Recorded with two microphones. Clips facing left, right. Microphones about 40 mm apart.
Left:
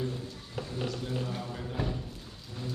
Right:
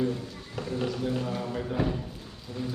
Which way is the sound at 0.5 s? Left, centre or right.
Right.